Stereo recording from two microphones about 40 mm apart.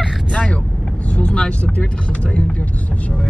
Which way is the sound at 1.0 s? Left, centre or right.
Left.